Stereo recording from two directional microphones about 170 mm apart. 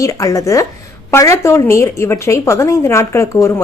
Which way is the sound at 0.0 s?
20° left (ahead or behind).